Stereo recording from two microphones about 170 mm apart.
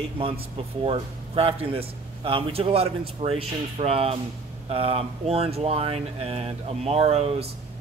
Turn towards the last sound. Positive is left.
turn(degrees=-35)  # may be behind; listen again after turning